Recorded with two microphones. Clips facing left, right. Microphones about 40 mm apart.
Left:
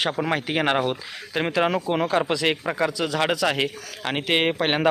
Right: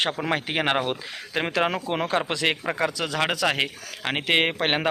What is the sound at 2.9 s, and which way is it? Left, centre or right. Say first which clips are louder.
Speech: left 3 dB; right.